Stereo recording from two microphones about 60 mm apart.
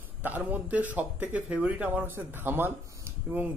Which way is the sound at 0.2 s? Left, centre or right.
Right.